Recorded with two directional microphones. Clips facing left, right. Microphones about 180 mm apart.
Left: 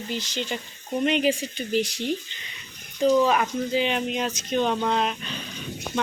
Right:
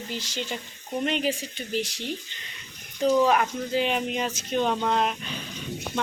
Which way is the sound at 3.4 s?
5° right (ahead or behind).